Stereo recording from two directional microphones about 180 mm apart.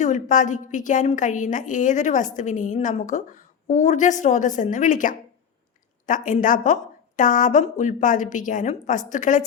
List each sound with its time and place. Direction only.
0.0 s a woman's voice: 45° left (ahead or behind)